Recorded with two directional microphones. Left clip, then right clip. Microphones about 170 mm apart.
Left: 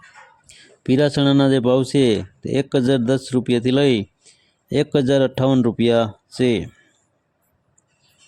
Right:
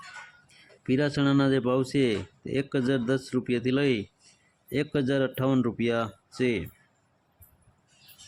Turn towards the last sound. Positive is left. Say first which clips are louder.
# left 8 dB
turn(degrees=40)  # may be behind; listen again after turning